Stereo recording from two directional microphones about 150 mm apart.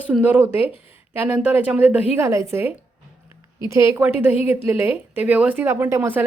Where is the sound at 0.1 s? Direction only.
10° right (ahead or behind).